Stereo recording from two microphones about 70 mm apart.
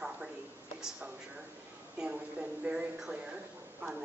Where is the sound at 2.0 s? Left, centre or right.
Centre.